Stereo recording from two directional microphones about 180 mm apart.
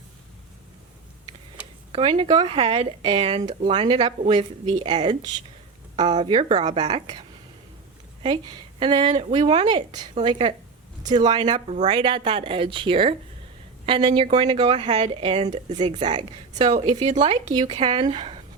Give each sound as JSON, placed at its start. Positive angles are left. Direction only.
{"t": 1.9, "sound": "a woman's voice", "side_deg": -30}